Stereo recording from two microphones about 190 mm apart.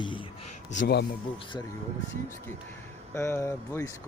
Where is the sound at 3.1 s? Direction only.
15° left (ahead or behind).